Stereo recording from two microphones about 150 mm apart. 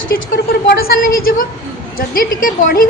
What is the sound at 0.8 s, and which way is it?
A woman's voice, 80° left.